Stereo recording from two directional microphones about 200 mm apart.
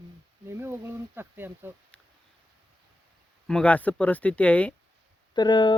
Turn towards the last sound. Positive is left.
turn(degrees=20)  # may be behind; listen again after turning